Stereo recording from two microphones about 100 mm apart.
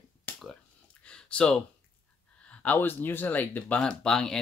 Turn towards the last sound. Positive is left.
turn(degrees=5)  # may be behind; listen again after turning